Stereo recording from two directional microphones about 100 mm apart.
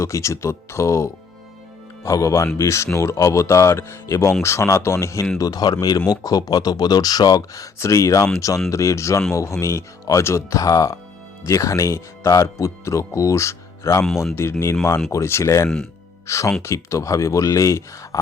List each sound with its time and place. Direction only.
0.0 s speech: 30° left (ahead or behind)
5.4 s speech: 40° left (ahead or behind)